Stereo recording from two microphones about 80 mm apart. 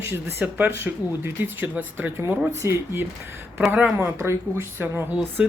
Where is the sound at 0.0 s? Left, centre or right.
Right.